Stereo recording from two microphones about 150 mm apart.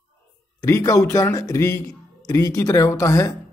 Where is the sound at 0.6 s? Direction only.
20° left (ahead or behind).